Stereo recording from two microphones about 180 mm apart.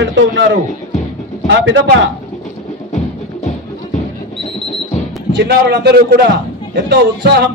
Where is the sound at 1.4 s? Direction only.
90° right.